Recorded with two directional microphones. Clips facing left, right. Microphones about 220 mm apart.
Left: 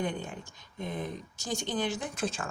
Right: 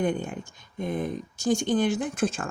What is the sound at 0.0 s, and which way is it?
Speech, 50° right (ahead or behind).